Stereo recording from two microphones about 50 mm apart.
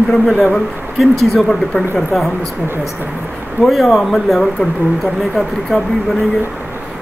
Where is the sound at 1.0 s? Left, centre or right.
Centre.